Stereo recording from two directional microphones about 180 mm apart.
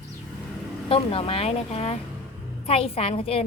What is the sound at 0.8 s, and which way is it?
A woman's voice, 30° left (ahead or behind).